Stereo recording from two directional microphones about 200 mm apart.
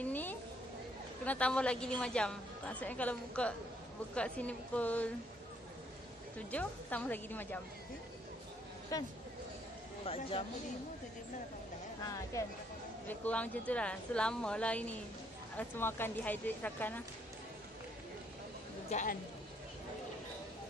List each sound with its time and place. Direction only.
0.0 s a sound: 10° left (ahead or behind)
1.2 s a woman's voice: 5° left (ahead or behind)
6.3 s speech: 5° left (ahead or behind)
10.0 s speech: 30° left (ahead or behind)
12.3 s speech: 15° left (ahead or behind)
18.9 s a man's voice: 35° left (ahead or behind)